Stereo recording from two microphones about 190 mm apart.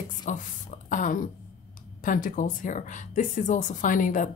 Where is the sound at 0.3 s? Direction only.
40° left (ahead or behind).